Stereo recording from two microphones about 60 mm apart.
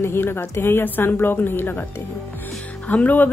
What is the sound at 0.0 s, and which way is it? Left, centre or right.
A woman's voice, left.